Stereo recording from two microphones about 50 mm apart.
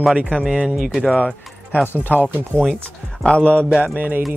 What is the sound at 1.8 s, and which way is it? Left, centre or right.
Speech, left.